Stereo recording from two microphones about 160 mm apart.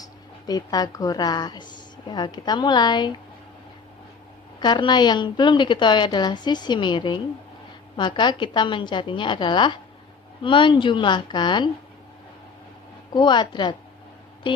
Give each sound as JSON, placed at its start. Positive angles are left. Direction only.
{"t": 0.0, "sound": "speech", "side_deg": 25}
{"t": 4.6, "sound": "a woman's voice", "side_deg": 30}
{"t": 13.1, "sound": "a woman's voice", "side_deg": 30}